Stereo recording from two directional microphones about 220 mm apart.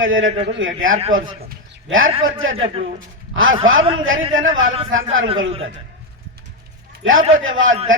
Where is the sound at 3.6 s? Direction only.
65° right (ahead or behind).